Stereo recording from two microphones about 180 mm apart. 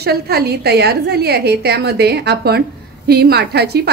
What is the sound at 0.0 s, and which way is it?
A woman's voice, 60° right (ahead or behind).